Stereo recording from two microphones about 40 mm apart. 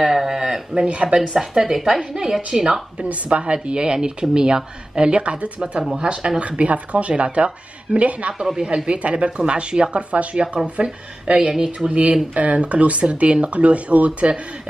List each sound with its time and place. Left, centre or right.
0.0 s speech: centre
0.7 s speech: right
1.0 s speech: centre
3.0 s speech: right
6.4 s speech: right
8.5 s speech: right
10.3 s speech: centre
11.5 s speech: centre
11.9 s speech: right